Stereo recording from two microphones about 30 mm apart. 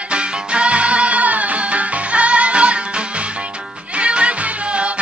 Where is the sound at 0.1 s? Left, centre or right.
Right.